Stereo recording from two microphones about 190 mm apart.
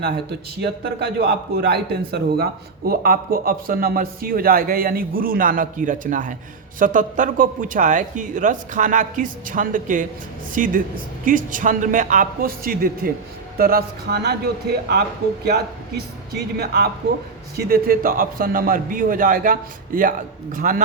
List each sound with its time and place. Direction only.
0.0 s a man's voice: 60° right (ahead or behind); by 20.8 s 45° right (ahead or behind)